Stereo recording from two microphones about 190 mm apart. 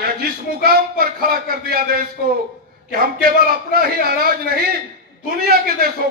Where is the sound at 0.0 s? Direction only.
55° right (ahead or behind).